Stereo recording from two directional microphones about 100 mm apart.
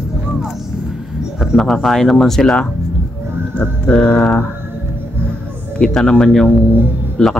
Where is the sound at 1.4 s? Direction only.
Centre (ahead or behind).